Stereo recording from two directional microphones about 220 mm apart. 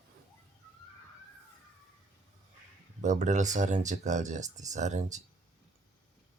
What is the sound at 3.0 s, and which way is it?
Speech, 35° right (ahead or behind).